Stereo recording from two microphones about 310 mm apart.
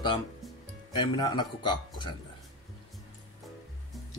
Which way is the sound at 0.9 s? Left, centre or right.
Centre.